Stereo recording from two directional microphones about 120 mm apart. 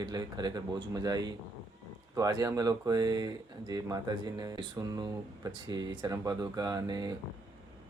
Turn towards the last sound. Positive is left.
turn(degrees=-35)  # may be behind; listen again after turning